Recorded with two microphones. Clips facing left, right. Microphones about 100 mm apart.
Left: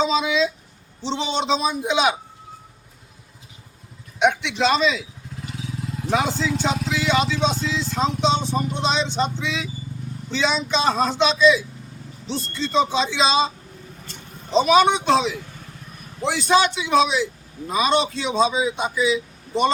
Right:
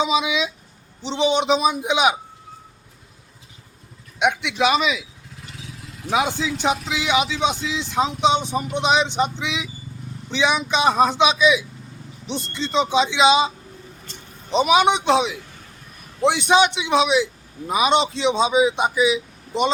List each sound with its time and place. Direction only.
0.0 s speech: 15° right (ahead or behind)
4.2 s speech: 10° right (ahead or behind)
6.1 s speech: 10° right (ahead or behind)
14.5 s speech: 15° right (ahead or behind)